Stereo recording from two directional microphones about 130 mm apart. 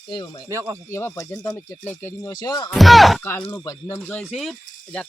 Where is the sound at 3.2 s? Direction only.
15° left (ahead or behind).